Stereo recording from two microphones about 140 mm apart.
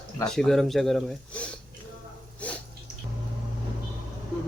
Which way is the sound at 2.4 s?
10° left (ahead or behind).